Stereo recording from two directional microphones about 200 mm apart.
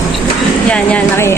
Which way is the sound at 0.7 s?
10° left (ahead or behind).